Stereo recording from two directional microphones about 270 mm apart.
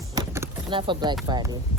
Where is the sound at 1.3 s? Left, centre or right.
Centre.